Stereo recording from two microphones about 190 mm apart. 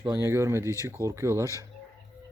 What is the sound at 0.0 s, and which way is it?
Speech, 20° right (ahead or behind).